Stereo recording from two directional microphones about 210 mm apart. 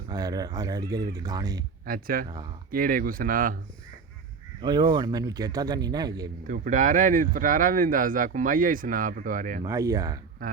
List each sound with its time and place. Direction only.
0.1 s speech: 20° right (ahead or behind)
1.9 s speech: 40° right (ahead or behind)
4.6 s speech: 20° right (ahead or behind)
6.5 s speech: 40° right (ahead or behind)
9.6 s speech: 15° right (ahead or behind)